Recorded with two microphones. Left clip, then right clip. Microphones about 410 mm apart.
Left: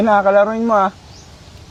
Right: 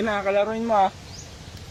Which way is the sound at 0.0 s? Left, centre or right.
Left.